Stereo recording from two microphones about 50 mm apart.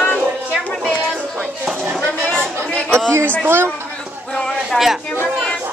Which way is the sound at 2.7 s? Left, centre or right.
Centre.